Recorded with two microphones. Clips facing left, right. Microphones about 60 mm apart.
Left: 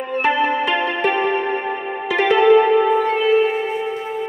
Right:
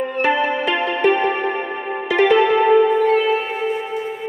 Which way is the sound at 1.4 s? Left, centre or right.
Right.